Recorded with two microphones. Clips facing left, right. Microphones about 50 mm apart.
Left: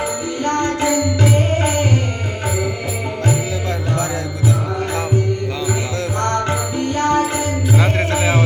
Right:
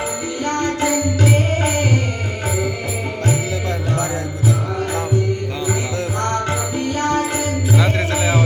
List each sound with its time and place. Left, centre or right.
0.4 s music: centre
6.2 s music: centre
7.8 s music: left